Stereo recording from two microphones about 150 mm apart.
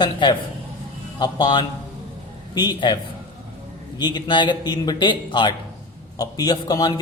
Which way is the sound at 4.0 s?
30° left (ahead or behind).